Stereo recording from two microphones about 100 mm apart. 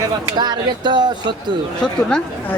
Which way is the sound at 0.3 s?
45° right (ahead or behind).